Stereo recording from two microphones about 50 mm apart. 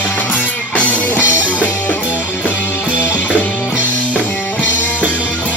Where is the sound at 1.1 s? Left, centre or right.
Right.